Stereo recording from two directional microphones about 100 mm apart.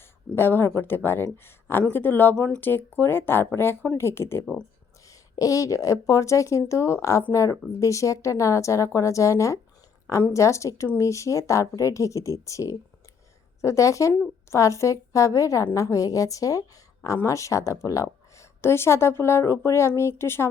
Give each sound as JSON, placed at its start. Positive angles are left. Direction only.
{"t": 0.3, "sound": "speech", "side_deg": 25}
{"t": 5.0, "sound": "a woman's voice", "side_deg": 35}